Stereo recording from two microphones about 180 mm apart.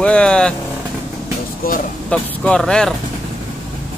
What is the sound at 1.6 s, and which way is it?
Speech, 55° left (ahead or behind).